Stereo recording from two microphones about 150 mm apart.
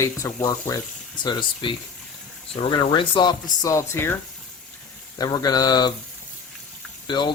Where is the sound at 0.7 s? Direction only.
30° left (ahead or behind).